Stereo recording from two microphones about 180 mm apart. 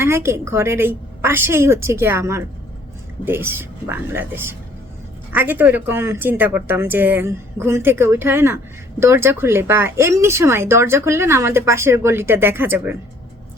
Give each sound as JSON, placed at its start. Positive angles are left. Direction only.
{"t": 0.0, "sound": "speech", "side_deg": -15}